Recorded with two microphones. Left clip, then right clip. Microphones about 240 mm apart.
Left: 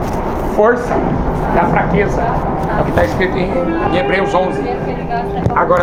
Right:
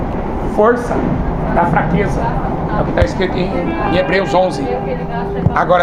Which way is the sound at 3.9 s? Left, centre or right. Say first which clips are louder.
Right 2 dB; right.